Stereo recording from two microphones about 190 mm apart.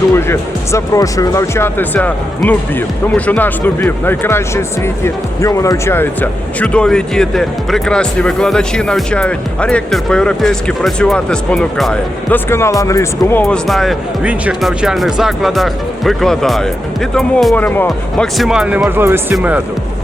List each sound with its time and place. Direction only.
0.2 s speech: 15° left (ahead or behind)
13.4 s speech: 5° left (ahead or behind)